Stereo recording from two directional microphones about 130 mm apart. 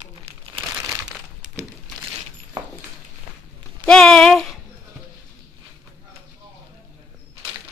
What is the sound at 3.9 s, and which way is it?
Speech, 5° left (ahead or behind).